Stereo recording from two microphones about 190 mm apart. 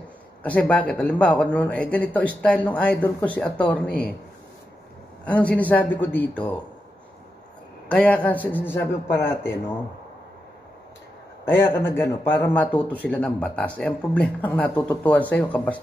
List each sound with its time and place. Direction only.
0.4 s a man's voice: 5° left (ahead or behind)
5.2 s a man's voice: 5° left (ahead or behind)
7.9 s a man's voice: 5° left (ahead or behind)
11.4 s a man's voice: 10° left (ahead or behind)